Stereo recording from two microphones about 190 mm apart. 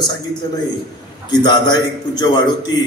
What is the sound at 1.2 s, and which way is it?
A man's voice, 20° left (ahead or behind).